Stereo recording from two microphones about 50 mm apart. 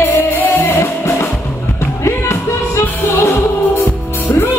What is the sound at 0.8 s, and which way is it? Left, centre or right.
Music, left.